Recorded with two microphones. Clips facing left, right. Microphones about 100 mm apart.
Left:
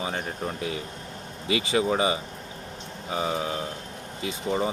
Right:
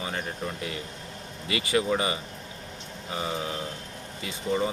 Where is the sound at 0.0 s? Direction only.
20° left (ahead or behind).